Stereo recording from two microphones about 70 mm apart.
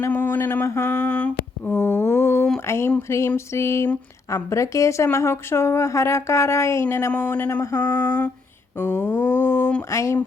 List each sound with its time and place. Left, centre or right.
0.1 s humming: left
2.1 s a sound: left
2.6 s speech: left
7.1 s humming: left
9.9 s speech: left